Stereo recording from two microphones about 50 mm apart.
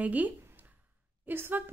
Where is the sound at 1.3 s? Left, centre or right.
Right.